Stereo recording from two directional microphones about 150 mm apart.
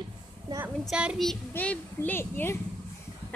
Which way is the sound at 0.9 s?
5° right (ahead or behind).